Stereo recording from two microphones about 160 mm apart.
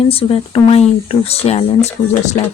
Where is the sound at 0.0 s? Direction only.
35° left (ahead or behind).